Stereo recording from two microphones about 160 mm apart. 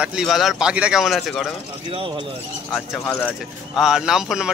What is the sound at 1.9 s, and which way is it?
Speech, 35° right (ahead or behind).